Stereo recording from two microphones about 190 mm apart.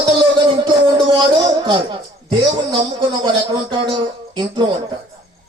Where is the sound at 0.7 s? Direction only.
25° right (ahead or behind).